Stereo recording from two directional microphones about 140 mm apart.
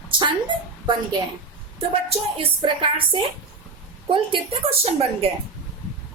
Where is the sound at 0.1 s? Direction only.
35° right (ahead or behind).